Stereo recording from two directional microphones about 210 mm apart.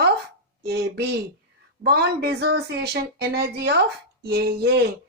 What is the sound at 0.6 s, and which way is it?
Speech, 50° right (ahead or behind).